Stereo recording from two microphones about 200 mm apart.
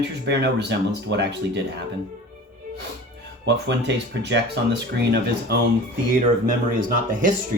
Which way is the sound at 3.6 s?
60° right (ahead or behind).